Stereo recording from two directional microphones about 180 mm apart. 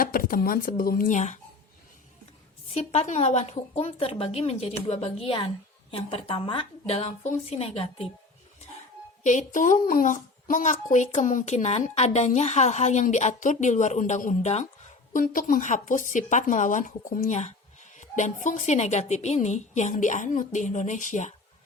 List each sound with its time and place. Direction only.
0.0 s speech: 55° left (ahead or behind)
2.7 s a woman's voice: 40° left (ahead or behind)
9.2 s a woman's voice: 45° left (ahead or behind)